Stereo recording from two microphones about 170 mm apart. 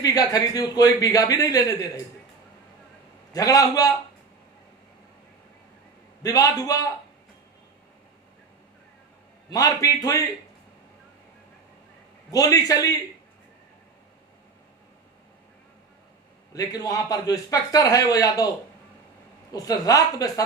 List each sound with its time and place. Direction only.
0.0 s a man's voice: 20° left (ahead or behind)
3.3 s a man's voice: 20° left (ahead or behind)
6.2 s a man's voice: 20° left (ahead or behind)
9.5 s a man's voice: 20° left (ahead or behind)
12.3 s a man's voice: 20° left (ahead or behind)
16.5 s a man's voice: 20° left (ahead or behind)
19.5 s a man's voice: 20° left (ahead or behind)